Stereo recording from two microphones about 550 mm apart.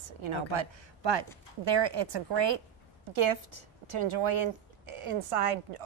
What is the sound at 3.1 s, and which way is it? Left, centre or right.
Speech, right.